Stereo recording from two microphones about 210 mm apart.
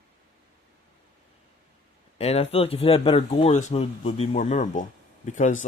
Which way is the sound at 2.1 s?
30° left (ahead or behind).